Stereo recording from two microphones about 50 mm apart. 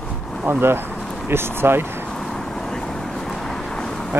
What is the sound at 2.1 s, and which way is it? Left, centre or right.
Vehicle, centre.